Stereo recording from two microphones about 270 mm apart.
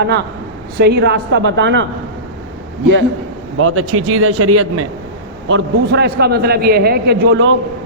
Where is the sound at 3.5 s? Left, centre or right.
Right.